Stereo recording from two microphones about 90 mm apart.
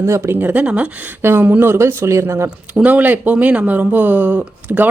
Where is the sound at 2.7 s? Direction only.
15° right (ahead or behind).